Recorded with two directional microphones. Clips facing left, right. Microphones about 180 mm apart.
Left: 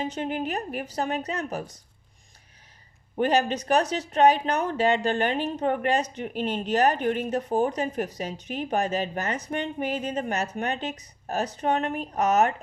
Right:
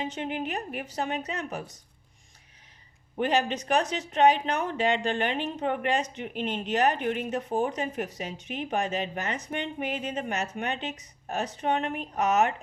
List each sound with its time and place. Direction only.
0.0 s speech: 40° left (ahead or behind)
3.2 s speech: 40° left (ahead or behind)